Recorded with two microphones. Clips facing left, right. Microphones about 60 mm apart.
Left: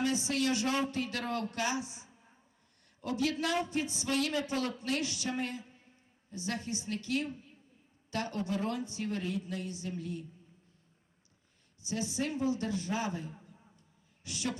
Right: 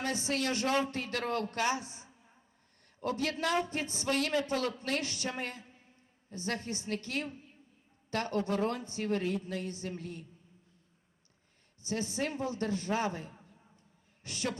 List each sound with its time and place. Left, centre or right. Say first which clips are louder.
0.0 s a man's voice: left 2 dB; right
11.8 s a man's voice: right 1 dB; right